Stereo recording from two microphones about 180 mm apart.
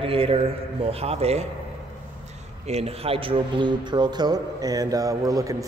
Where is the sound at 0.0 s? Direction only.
30° right (ahead or behind).